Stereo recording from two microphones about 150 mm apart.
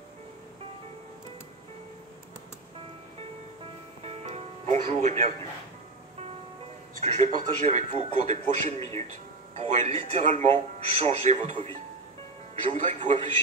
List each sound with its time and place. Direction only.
4.0 s music: 45° right (ahead or behind)
7.0 s a man's voice: 50° right (ahead or behind)